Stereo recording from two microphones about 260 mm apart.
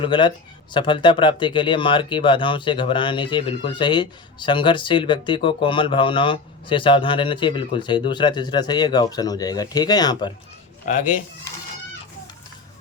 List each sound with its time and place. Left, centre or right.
0.0 s speech: centre